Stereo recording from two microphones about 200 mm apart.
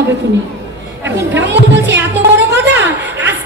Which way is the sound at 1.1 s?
60° right (ahead or behind).